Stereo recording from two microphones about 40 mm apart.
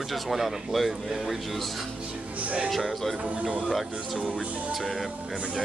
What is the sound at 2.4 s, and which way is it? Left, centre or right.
Speech, right.